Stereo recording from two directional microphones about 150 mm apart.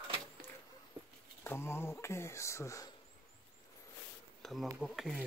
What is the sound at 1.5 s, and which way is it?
Speech, 15° left (ahead or behind).